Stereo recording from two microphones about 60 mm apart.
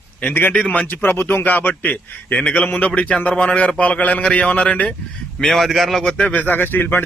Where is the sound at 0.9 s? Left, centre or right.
Left.